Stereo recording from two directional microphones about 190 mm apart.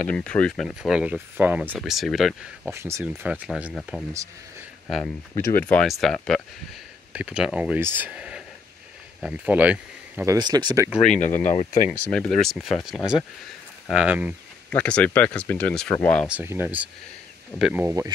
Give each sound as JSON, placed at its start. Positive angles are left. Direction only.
{"t": 0.0, "sound": "speech", "side_deg": 5}
{"t": 2.7, "sound": "speech", "side_deg": -15}
{"t": 4.1, "sound": "speech", "side_deg": -15}
{"t": 5.0, "sound": "speech", "side_deg": 15}
{"t": 10.3, "sound": "speech", "side_deg": -20}
{"t": 11.0, "sound": "speech", "side_deg": 40}
{"t": 11.9, "sound": "speech", "side_deg": 5}
{"t": 14.7, "sound": "speech", "side_deg": 5}
{"t": 16.3, "sound": "speech", "side_deg": -10}